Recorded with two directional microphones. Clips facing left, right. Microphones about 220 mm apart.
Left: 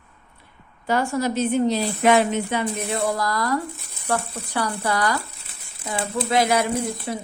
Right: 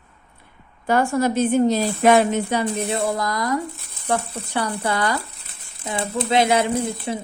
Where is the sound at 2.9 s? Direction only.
25° right (ahead or behind).